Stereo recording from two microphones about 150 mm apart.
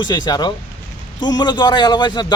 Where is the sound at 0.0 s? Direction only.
30° left (ahead or behind).